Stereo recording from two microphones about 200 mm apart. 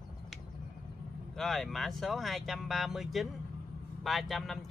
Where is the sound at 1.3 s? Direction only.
Centre (ahead or behind).